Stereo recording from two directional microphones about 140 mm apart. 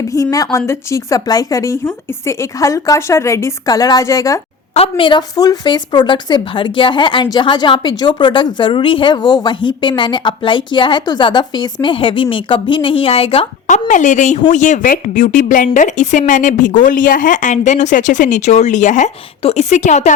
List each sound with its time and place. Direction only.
0.1 s a woman's voice: 25° left (ahead or behind)
4.7 s a woman's voice: 40° left (ahead or behind)
13.7 s speech: 60° left (ahead or behind)